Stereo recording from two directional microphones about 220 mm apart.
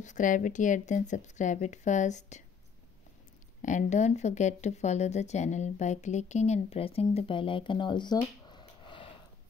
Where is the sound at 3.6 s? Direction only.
35° left (ahead or behind).